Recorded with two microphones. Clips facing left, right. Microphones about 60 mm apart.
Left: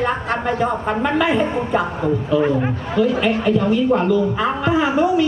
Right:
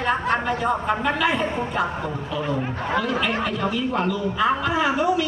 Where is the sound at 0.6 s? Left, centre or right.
Left.